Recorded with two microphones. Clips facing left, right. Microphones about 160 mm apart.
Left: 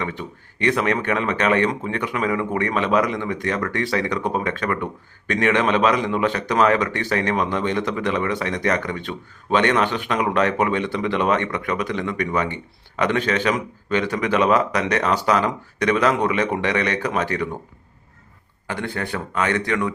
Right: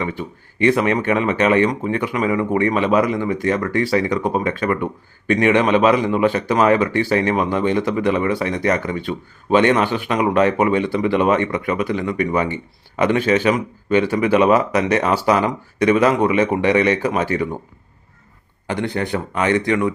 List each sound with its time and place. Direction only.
0.0 s speech: 5° right (ahead or behind)
18.7 s speech: 20° right (ahead or behind)